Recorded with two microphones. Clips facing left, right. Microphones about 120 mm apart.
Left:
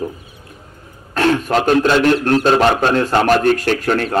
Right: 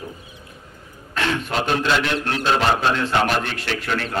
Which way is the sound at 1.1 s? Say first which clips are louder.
Left 8 dB; 45° left (ahead or behind).